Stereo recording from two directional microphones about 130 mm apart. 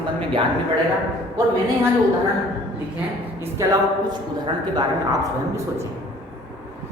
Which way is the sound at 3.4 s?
25° right (ahead or behind).